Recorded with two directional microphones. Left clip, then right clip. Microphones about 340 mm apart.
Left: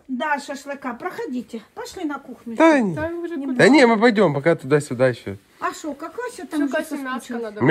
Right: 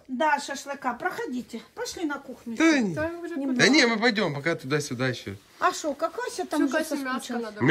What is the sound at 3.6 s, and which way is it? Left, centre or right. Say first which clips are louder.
Speech: left 7 dB; centre.